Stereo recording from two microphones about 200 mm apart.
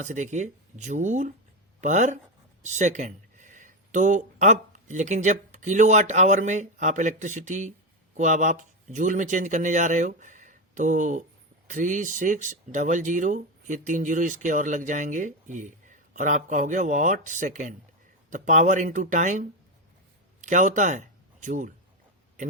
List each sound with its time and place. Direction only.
0.0 s speech: 35° right (ahead or behind)